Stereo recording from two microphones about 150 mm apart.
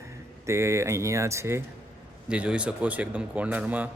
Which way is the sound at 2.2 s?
10° right (ahead or behind).